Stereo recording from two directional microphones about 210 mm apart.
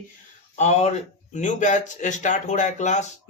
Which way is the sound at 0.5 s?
35° left (ahead or behind).